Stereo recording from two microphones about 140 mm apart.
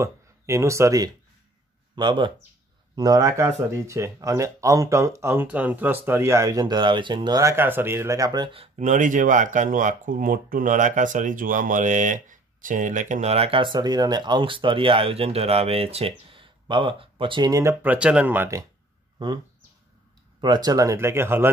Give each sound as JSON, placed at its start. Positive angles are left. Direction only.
{"t": 0.0, "sound": "speech", "side_deg": -20}
{"t": 2.0, "sound": "speech", "side_deg": -35}
{"t": 8.7, "sound": "speech", "side_deg": -60}
{"t": 17.5, "sound": "speech", "side_deg": -20}
{"t": 17.9, "sound": "speech", "side_deg": -10}
{"t": 19.1, "sound": "speech", "side_deg": -30}